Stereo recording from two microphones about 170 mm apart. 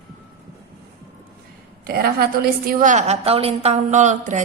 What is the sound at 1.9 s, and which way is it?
A woman's voice, 65° right (ahead or behind).